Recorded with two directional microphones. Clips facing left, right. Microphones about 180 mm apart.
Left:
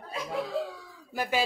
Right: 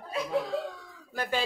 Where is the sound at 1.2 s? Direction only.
10° left (ahead or behind).